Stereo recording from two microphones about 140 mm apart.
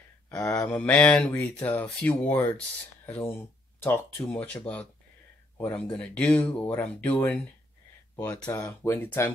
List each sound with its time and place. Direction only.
0.3 s speech: 5° left (ahead or behind)